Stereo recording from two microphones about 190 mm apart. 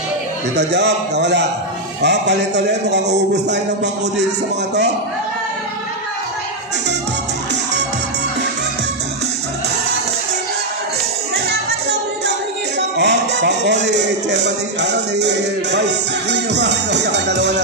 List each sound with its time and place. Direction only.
0.6 s speech: 65° right (ahead or behind)
12.9 s speech: 65° right (ahead or behind)